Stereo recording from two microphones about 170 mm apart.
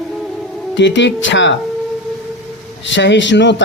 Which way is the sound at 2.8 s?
90° left.